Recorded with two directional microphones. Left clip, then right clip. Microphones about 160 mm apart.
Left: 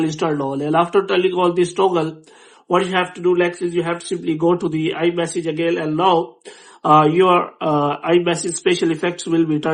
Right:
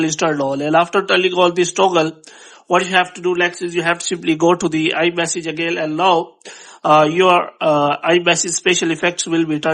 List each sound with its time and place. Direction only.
0.0 s speech: 30° right (ahead or behind)